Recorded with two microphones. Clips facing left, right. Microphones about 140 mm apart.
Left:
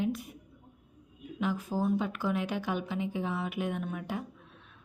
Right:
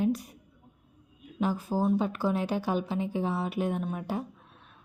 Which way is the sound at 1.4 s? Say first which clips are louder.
Right 3 dB; 35° right (ahead or behind).